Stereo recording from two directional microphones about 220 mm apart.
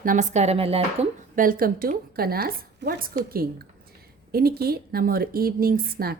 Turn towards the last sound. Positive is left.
turn(degrees=-40)  # may be behind; listen again after turning